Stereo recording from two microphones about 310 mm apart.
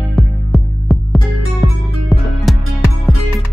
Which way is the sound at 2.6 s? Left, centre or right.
Right.